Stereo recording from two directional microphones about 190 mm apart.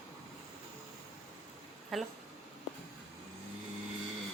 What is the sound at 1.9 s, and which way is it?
Speech, centre (ahead or behind).